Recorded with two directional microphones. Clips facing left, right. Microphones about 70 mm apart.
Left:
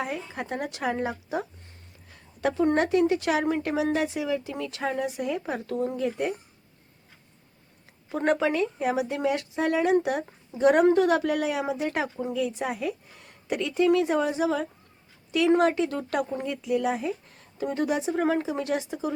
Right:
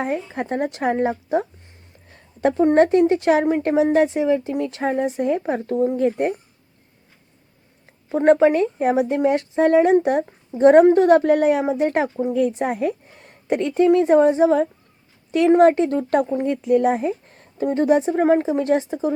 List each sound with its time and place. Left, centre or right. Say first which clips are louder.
0.0 s a woman's voice: right 7 dB; right
6.0 s speech: right 8 dB; right
8.1 s a woman's voice: right 10 dB; right
18.1 s speech: right 8 dB; right